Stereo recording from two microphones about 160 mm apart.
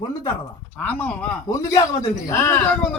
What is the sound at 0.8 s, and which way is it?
Speech, 10° left (ahead or behind).